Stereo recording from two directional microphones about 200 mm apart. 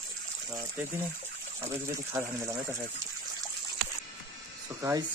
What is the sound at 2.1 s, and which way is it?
Speech, 15° right (ahead or behind).